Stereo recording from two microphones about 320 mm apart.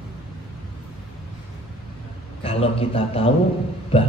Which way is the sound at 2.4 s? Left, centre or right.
Centre.